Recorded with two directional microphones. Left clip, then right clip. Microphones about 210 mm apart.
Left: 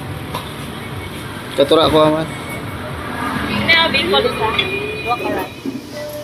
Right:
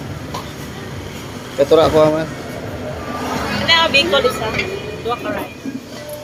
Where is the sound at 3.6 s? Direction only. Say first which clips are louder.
Right 1 dB; 60° right (ahead or behind).